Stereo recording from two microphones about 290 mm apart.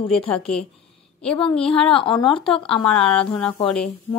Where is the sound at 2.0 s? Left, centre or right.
Centre.